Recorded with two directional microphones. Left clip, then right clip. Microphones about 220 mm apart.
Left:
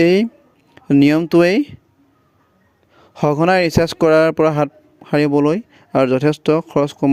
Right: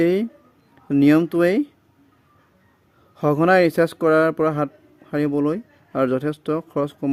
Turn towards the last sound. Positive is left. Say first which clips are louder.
# left 7 dB
turn(degrees=30)  # may be behind; listen again after turning